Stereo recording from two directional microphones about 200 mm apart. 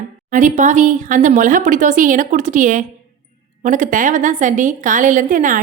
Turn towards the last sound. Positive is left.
turn(degrees=-40)  # may be behind; listen again after turning